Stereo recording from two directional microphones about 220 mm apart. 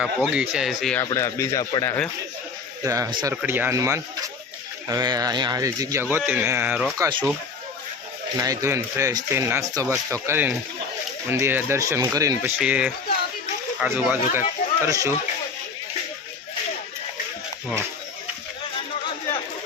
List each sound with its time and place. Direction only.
0.0 s speech: 5° right (ahead or behind)
1.1 s speech: 15° left (ahead or behind)
2.8 s speech: 15° right (ahead or behind)
7.0 s speech: 20° right (ahead or behind)
8.4 s speech: 15° right (ahead or behind)